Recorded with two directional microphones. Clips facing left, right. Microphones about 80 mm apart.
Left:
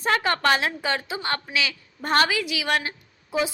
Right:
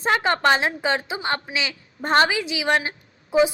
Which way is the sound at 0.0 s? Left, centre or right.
Right.